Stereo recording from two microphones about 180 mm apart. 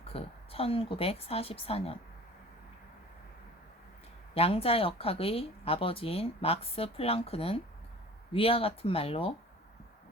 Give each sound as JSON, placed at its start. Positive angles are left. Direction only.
{"t": 0.1, "sound": "speech", "side_deg": 30}
{"t": 4.4, "sound": "speech", "side_deg": 35}